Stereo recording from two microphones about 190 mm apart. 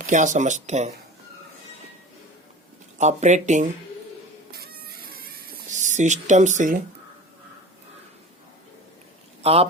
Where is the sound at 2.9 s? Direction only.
40° right (ahead or behind).